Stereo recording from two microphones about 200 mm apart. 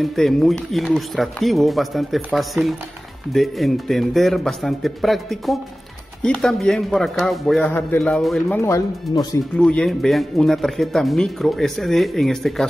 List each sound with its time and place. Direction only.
0.0 s speech: centre (ahead or behind)
8.5 s speech: 15° left (ahead or behind)
9.6 s speech: 5° left (ahead or behind)